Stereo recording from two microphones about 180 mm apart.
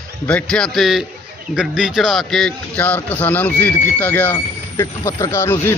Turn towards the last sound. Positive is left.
turn(degrees=15)  # may be behind; listen again after turning